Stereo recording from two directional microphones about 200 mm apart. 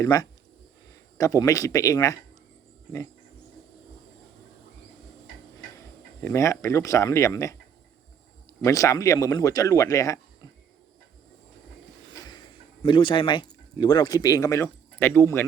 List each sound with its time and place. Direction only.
0.0 s speech: 15° left (ahead or behind)
6.2 s speech: 15° left (ahead or behind)
8.6 s speech: 15° left (ahead or behind)
12.8 s speech: 25° left (ahead or behind)